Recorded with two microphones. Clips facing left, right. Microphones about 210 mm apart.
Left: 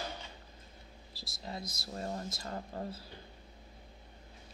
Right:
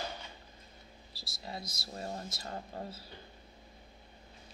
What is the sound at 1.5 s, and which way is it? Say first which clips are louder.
Speech: left 1 dB; 45° left (ahead or behind).